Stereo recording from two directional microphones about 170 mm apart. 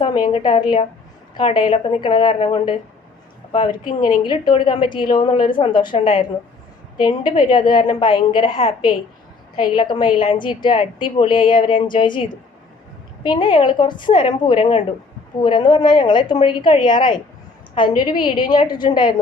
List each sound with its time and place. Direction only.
0.0 s a woman's voice: 25° left (ahead or behind)
13.2 s a woman's voice: 25° left (ahead or behind)